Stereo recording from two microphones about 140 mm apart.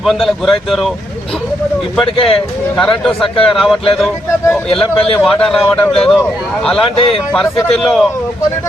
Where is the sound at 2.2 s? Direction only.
45° left (ahead or behind).